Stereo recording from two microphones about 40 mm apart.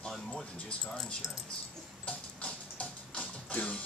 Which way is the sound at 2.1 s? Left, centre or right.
Left.